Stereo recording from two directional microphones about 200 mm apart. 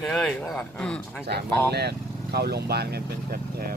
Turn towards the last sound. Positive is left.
turn(degrees=-50)  # may be behind; listen again after turning